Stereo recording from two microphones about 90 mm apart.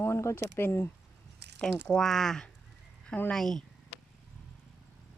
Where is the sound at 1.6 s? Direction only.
5° left (ahead or behind).